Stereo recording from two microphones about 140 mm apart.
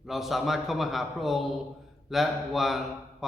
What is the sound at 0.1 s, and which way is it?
Speech, centre (ahead or behind).